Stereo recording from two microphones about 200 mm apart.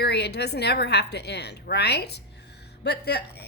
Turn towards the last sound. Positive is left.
turn(degrees=55)  # may be behind; listen again after turning